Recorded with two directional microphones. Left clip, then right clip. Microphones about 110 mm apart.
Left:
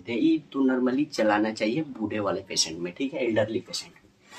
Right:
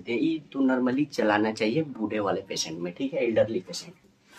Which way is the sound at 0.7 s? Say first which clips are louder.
Even; 40° right (ahead or behind).